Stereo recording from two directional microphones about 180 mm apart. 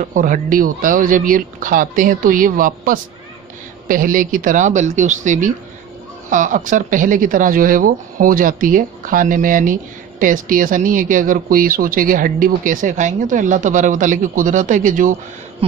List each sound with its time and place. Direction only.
0.0 s speech: 50° right (ahead or behind)